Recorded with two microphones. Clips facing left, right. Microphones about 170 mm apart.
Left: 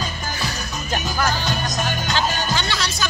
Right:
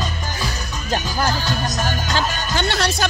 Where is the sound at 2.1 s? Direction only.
55° right (ahead or behind).